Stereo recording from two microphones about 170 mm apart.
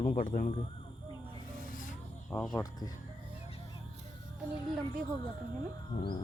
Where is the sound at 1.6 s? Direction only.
55° left (ahead or behind).